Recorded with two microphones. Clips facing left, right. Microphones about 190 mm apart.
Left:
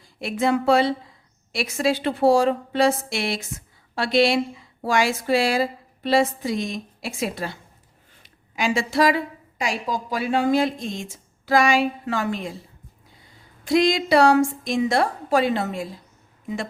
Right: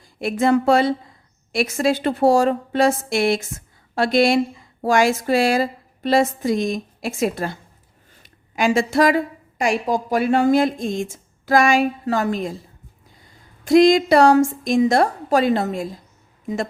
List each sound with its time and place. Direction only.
0.0 s a woman's voice: 50° right (ahead or behind)
13.7 s a woman's voice: 45° right (ahead or behind)